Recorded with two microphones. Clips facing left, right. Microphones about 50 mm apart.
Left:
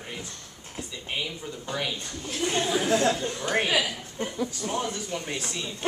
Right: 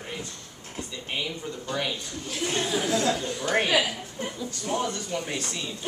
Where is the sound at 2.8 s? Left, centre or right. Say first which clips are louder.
Left 2 dB; left.